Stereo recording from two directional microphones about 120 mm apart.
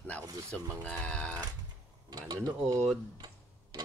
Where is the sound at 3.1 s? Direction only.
35° right (ahead or behind).